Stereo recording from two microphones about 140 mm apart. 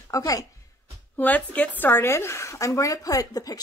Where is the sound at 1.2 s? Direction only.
10° left (ahead or behind).